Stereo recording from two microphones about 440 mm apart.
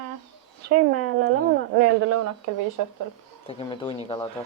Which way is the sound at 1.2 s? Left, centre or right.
Right.